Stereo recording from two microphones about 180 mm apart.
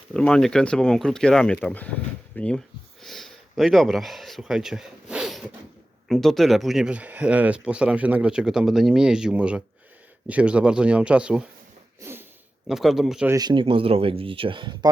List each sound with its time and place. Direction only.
0.1 s speech: 5° left (ahead or behind)
12.6 s speech: centre (ahead or behind)
13.2 s speech: 20° right (ahead or behind)